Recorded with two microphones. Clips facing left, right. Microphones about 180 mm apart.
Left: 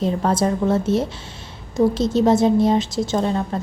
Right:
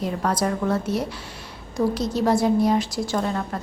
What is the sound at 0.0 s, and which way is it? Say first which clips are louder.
A woman's voice: left 4 dB; 25° left (ahead or behind).